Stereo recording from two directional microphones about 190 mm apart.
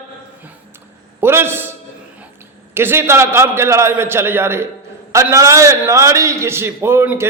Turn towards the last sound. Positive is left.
turn(degrees=-10)  # may be behind; listen again after turning